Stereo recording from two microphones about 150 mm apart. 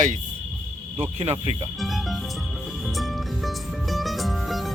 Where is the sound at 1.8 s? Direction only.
Centre (ahead or behind).